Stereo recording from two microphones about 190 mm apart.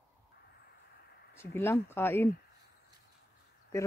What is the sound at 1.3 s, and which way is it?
Speech, 15° left (ahead or behind).